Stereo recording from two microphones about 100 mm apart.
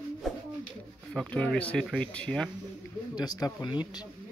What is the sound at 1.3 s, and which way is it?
Speech, 15° left (ahead or behind).